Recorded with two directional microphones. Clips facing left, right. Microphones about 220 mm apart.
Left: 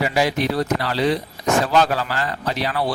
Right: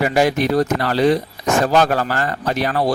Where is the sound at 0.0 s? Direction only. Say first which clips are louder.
Right 4 dB; 50° right (ahead or behind).